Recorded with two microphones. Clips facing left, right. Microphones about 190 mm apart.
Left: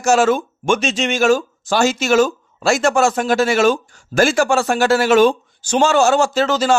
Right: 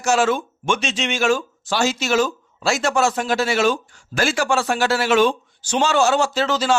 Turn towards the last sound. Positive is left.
turn(degrees=45)  # may be behind; listen again after turning